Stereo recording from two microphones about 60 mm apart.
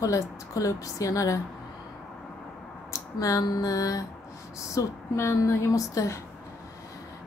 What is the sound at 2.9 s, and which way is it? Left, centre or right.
Speech, left.